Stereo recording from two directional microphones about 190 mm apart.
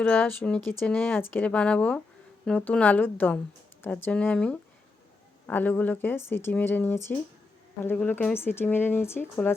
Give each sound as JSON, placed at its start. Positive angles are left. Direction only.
{"t": 0.0, "sound": "speech", "side_deg": 5}